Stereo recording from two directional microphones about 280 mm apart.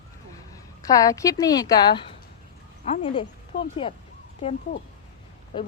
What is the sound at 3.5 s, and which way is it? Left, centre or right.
Speech, left.